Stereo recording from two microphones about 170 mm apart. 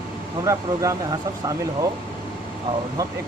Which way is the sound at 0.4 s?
20° right (ahead or behind).